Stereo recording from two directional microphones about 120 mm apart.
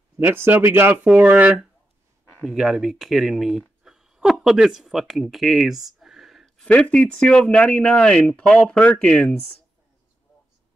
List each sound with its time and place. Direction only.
0.2 s speech: 15° right (ahead or behind); by 3.6 s centre (ahead or behind)
3.8 s a sound: 5° right (ahead or behind)
6.7 s speech: 10° left (ahead or behind)